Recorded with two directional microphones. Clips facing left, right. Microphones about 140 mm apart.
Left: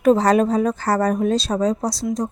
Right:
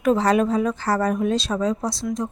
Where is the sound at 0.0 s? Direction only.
35° left (ahead or behind).